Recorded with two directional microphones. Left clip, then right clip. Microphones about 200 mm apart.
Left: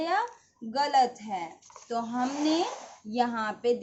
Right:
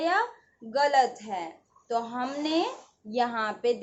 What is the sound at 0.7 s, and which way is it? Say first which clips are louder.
A woman's voice: right 1 dB; 20° left (ahead or behind).